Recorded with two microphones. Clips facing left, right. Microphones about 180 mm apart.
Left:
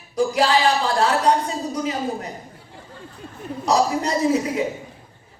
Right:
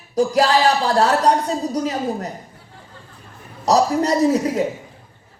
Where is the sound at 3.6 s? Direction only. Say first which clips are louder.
Right 3 dB; 40° right (ahead or behind).